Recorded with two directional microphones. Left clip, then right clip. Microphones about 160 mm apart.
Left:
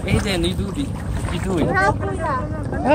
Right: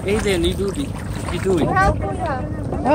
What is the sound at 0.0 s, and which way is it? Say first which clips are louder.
Speech: right 3 dB; 40° left (ahead or behind).